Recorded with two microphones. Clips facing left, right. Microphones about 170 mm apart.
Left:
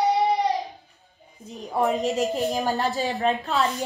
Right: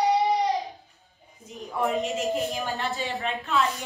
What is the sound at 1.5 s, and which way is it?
A woman's voice, 35° left (ahead or behind).